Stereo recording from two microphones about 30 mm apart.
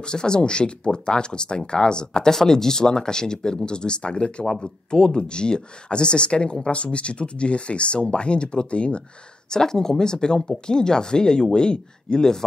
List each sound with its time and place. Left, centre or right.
0.0 s speech: left
2.3 s speech: centre; by 9.0 s left
9.5 s speech: left